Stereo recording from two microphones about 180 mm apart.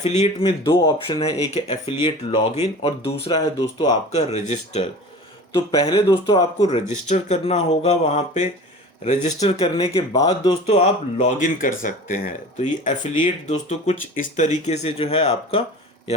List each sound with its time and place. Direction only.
0.0 s speech: 35° left (ahead or behind)
0.7 s speech: 20° left (ahead or behind)
1.2 s speech: 30° left (ahead or behind)
3.3 s speech: 25° left (ahead or behind)
4.3 s speech: 40° left (ahead or behind)
5.5 s speech: 30° left (ahead or behind)
9.8 s speech: 30° left (ahead or behind)